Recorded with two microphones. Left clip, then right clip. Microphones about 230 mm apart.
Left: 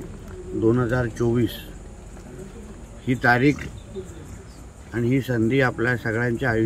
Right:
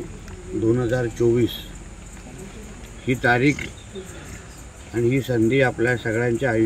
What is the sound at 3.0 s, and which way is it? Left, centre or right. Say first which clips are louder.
Speech: even; centre.